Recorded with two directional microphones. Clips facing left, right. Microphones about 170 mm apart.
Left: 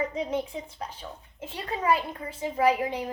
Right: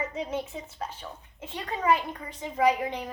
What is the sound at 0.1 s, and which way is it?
Speech, 15° left (ahead or behind).